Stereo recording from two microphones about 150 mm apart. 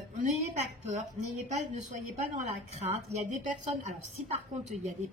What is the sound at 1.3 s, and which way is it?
A woman's voice, 50° right (ahead or behind).